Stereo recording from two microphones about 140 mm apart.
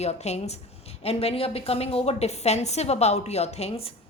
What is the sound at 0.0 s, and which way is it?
A woman's voice, 50° left (ahead or behind).